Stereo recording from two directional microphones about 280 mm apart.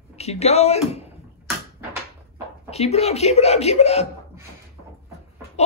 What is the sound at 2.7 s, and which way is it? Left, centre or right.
Speech, left.